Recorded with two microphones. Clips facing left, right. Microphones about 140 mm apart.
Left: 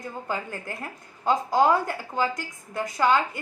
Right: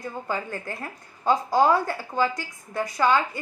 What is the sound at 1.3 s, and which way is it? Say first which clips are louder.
A woman's voice: right 1 dB; 15° left (ahead or behind).